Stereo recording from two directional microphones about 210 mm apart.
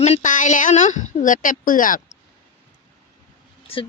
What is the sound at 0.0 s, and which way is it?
Speech, 35° left (ahead or behind).